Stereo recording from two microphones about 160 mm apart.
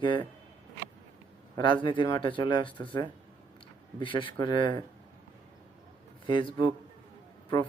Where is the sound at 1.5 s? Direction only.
30° left (ahead or behind).